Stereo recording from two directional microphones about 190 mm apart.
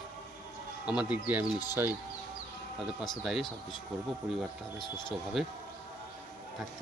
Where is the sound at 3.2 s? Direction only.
Centre (ahead or behind).